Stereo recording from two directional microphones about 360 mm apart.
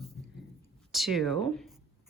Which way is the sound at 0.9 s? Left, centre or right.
Centre.